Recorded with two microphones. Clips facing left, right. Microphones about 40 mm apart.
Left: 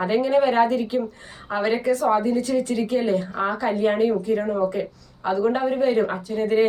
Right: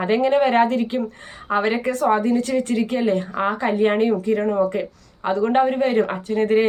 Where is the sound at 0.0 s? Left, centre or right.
Right.